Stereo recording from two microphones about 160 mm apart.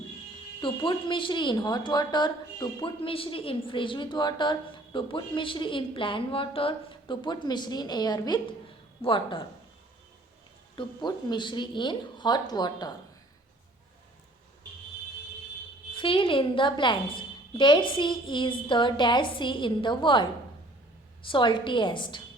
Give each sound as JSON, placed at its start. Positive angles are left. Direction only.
{"t": 0.6, "sound": "a woman's voice", "side_deg": 30}
{"t": 10.8, "sound": "a woman's voice", "side_deg": 30}
{"t": 15.9, "sound": "a woman's voice", "side_deg": 30}